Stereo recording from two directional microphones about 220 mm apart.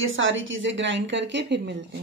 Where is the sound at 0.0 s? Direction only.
60° right (ahead or behind).